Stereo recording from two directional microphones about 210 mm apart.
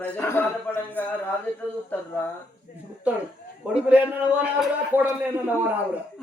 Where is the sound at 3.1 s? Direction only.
5° right (ahead or behind).